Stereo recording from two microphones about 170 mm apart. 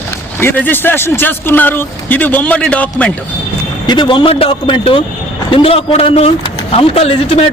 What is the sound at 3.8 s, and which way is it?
Speech, 25° left (ahead or behind).